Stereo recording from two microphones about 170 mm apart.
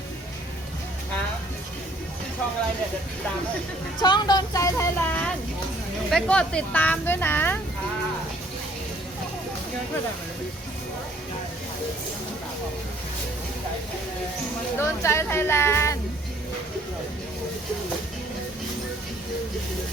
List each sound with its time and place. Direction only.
4.0 s speech: 25° left (ahead or behind)
14.8 s speech: 15° left (ahead or behind)